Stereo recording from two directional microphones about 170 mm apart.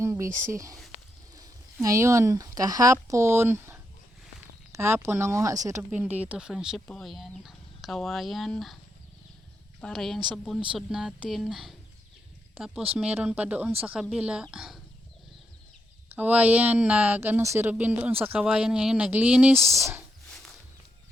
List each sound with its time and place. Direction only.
0.0 s a sound: 15° right (ahead or behind)
0.5 s speech: 20° right (ahead or behind); by 8.8 s centre (ahead or behind)
9.8 s speech: centre (ahead or behind)
16.0 s speech: 10° right (ahead or behind)
19.7 s speech: 15° right (ahead or behind)